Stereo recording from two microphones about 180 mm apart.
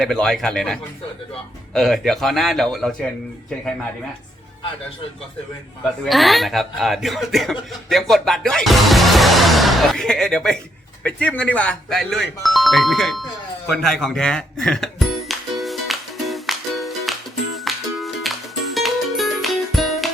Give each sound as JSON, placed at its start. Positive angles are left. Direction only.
{"t": 0.0, "sound": "speech", "side_deg": 0}
{"t": 6.1, "sound": "speech", "side_deg": 0}
{"t": 14.6, "sound": "music", "side_deg": 5}